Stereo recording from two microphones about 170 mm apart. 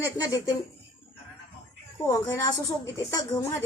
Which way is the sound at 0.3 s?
20° left (ahead or behind).